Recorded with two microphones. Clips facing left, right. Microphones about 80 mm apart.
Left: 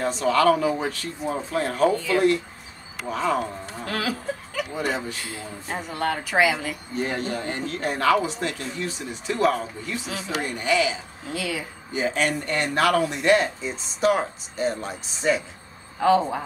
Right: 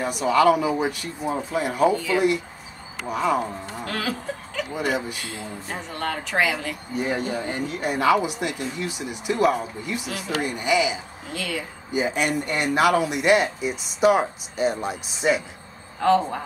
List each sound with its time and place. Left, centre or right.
0.0 s speech: centre
3.8 s chuckle: centre
4.7 s speech: centre
5.4 s speech: centre
7.0 s speech: centre
11.3 s speech: centre
11.9 s speech: centre
16.0 s speech: centre